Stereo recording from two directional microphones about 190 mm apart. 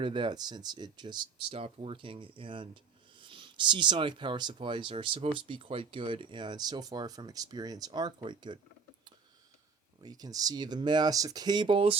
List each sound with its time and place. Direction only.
0.0 s speech: 25° right (ahead or behind)
10.0 s speech: 20° right (ahead or behind)